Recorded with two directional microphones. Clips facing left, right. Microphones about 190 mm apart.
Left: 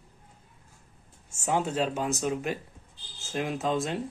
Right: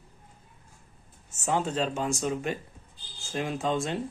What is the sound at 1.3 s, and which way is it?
Speech, 10° left (ahead or behind).